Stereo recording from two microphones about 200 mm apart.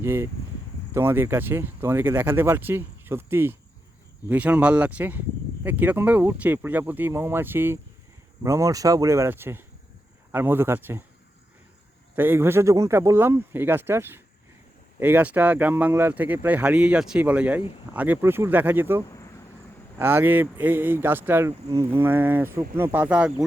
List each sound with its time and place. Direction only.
0.0 s speech: 10° right (ahead or behind)
12.1 s speech: 10° right (ahead or behind)
19.0 s a sound: 15° left (ahead or behind)
20.0 s speech: 10° right (ahead or behind)